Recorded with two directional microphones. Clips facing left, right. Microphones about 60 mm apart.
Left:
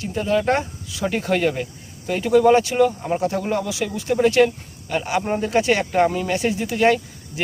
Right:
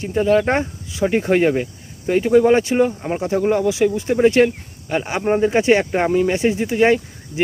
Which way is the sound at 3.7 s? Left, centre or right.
Right.